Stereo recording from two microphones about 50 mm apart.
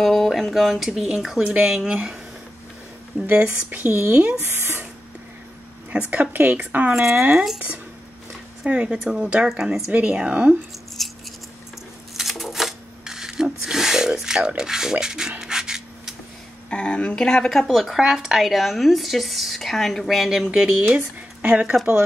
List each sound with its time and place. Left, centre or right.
0.0 s speech: centre
3.3 s speech: right
3.9 s speech: right
5.9 s a woman's voice: right
6.9 s speech: centre
8.6 s speech: right; by 9.8 s centre
10.0 s speech: right
11.0 s scissors: centre
12.2 s filing: centre
14.6 s rub: centre
16.7 s speech: left
17.6 s speech: centre
21.4 s speech: right